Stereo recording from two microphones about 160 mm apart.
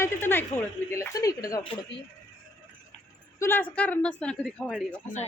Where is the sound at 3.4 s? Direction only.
15° left (ahead or behind).